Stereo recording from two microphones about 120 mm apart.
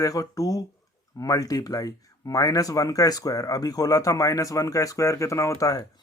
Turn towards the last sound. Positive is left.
turn(degrees=30)  # may be behind; listen again after turning